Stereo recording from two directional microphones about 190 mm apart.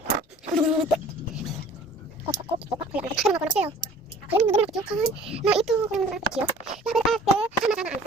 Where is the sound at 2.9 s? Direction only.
5° right (ahead or behind).